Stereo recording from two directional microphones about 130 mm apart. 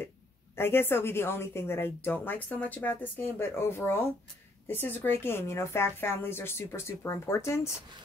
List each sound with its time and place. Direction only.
0.6 s a woman's voice: 15° left (ahead or behind)